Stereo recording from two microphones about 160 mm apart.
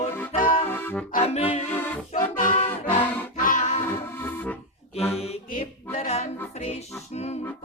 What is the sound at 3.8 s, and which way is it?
Music, 15° left (ahead or behind).